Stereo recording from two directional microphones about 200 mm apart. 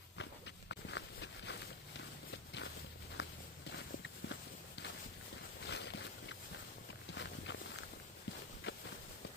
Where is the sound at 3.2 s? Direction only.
60° left (ahead or behind).